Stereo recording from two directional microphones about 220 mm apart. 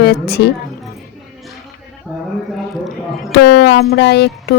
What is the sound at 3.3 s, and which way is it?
Speech, 50° left (ahead or behind).